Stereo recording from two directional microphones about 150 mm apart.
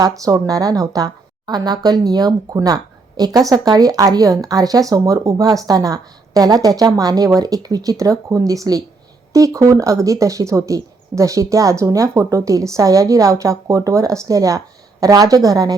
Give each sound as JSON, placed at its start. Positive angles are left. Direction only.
{"t": 0.3, "sound": "a woman's voice", "side_deg": -25}